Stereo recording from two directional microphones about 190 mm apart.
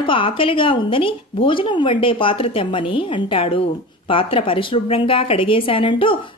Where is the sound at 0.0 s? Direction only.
25° left (ahead or behind).